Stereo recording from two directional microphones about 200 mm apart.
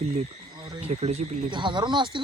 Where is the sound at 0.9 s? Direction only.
30° right (ahead or behind).